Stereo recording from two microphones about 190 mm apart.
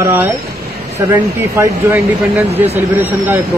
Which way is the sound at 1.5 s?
15° right (ahead or behind).